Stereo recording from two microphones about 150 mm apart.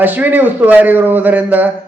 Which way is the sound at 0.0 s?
10° right (ahead or behind).